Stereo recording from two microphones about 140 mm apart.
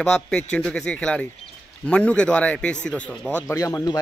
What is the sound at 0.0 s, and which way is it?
Speech, 5° left (ahead or behind).